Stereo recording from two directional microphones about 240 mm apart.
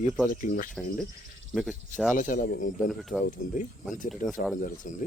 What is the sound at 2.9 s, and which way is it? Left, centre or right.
Speech, centre.